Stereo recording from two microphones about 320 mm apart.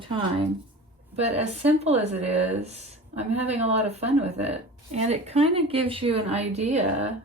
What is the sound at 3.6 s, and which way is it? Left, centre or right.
Speech, centre.